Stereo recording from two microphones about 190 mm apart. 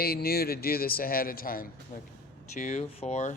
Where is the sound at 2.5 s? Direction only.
40° left (ahead or behind).